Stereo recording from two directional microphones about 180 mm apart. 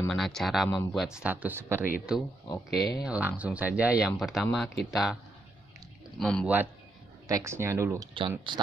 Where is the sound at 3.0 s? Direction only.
5° right (ahead or behind).